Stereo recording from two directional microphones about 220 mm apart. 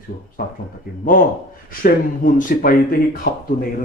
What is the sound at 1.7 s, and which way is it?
Speech, 40° left (ahead or behind).